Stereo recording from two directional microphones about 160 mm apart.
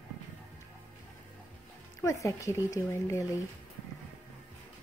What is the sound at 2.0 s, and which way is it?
Speech, 20° left (ahead or behind).